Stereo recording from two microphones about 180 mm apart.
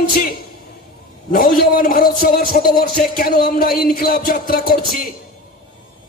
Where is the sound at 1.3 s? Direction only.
55° left (ahead or behind).